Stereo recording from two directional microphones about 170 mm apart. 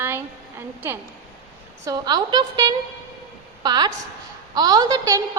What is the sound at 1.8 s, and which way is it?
A woman's voice, 20° right (ahead or behind).